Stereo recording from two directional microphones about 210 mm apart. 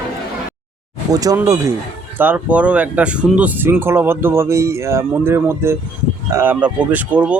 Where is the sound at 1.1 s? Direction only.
15° right (ahead or behind).